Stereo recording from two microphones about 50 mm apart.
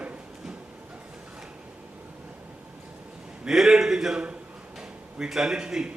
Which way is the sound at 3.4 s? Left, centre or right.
Centre.